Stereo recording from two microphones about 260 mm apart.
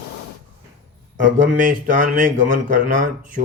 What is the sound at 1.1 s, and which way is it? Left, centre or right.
Speech, right.